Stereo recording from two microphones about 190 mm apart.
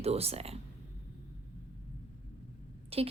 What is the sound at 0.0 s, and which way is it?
Speech, 30° right (ahead or behind).